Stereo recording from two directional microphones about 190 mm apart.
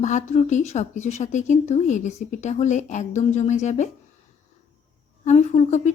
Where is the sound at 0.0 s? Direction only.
40° left (ahead or behind).